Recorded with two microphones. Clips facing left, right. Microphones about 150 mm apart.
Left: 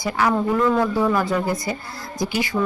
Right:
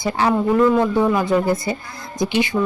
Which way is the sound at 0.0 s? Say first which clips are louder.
Right 2 dB; 30° right (ahead or behind).